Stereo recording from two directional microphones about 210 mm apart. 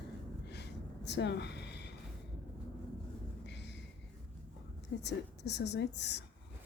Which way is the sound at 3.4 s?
55° left (ahead or behind).